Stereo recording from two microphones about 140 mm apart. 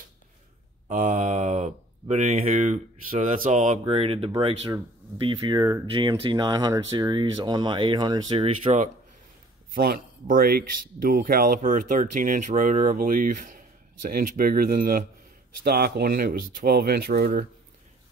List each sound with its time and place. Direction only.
0.8 s speech: 60° right (ahead or behind)
3.8 s speech: 45° right (ahead or behind)
9.8 s speech: 85° right